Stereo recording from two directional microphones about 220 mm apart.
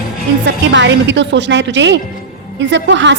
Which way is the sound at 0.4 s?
55° right (ahead or behind).